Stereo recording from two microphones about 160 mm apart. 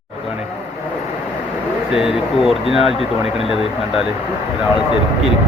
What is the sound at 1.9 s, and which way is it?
Speech, 5° right (ahead or behind).